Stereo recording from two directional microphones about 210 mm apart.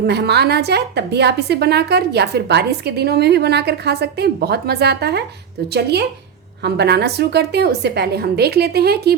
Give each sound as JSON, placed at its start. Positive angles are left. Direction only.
{"t": 0.0, "sound": "a woman's voice", "side_deg": -50}